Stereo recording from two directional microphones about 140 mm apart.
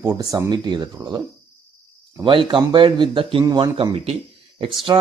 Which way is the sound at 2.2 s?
40° right (ahead or behind).